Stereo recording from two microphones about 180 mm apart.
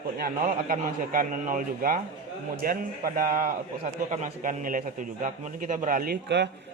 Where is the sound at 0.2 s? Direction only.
50° right (ahead or behind).